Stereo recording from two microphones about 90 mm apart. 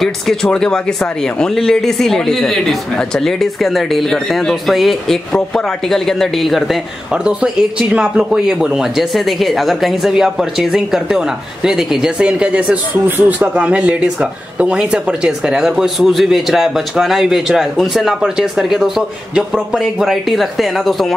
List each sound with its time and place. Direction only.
0.0 s speech: 5° left (ahead or behind)